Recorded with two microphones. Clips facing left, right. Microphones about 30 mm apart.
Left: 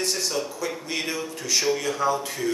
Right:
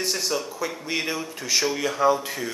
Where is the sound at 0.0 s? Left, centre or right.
Centre.